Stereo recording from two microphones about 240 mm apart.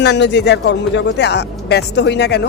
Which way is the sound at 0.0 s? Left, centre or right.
Left.